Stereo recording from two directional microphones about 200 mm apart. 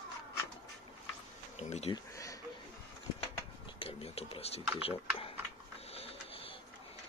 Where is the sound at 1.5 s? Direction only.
35° left (ahead or behind).